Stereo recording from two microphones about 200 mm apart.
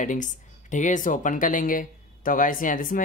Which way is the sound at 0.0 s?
40° left (ahead or behind).